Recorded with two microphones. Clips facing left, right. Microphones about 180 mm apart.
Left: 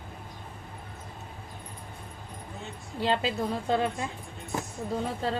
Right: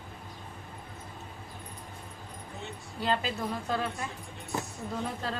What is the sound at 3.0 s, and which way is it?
A woman's voice, 30° left (ahead or behind).